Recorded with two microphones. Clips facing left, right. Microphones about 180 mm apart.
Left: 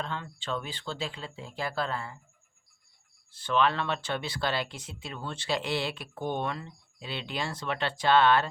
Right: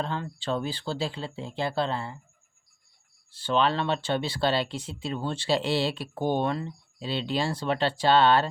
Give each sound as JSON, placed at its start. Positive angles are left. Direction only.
{"t": 0.0, "sound": "speech", "side_deg": -35}
{"t": 3.3, "sound": "speech", "side_deg": -30}